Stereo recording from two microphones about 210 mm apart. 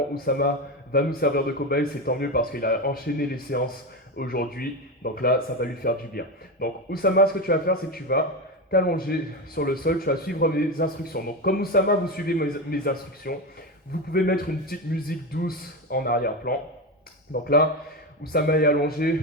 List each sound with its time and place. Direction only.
0.1 s speech: 45° left (ahead or behind)